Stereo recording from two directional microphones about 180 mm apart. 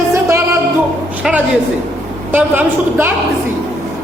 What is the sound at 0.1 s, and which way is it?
Music, 15° right (ahead or behind).